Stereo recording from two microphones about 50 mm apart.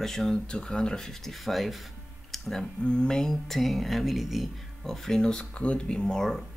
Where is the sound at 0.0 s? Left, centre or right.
Centre.